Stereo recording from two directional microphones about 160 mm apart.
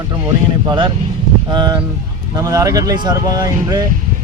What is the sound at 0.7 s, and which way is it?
Speech, 30° right (ahead or behind).